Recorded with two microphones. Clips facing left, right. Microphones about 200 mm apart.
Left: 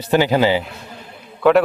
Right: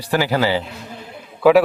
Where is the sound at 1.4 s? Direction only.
5° right (ahead or behind).